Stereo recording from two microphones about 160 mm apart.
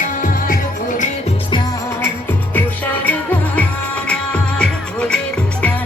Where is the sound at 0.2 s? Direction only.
55° left (ahead or behind).